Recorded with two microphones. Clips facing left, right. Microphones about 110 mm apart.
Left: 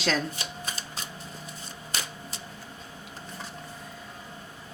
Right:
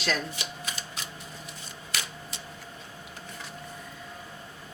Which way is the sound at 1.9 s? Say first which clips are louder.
Left 1 dB; 40° left (ahead or behind).